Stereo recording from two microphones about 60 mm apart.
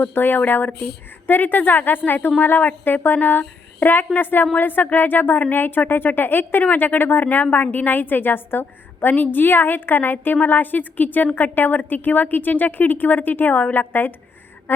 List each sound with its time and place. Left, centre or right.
0.0 s speech: left